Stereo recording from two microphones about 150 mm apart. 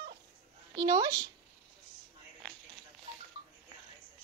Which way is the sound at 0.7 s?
25° right (ahead or behind).